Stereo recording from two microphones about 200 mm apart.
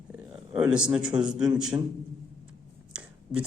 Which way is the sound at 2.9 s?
5° right (ahead or behind).